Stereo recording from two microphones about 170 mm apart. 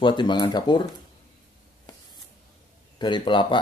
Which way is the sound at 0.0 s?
25° left (ahead or behind).